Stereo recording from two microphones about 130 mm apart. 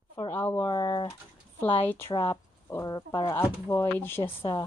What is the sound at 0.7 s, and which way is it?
Speech, 30° left (ahead or behind).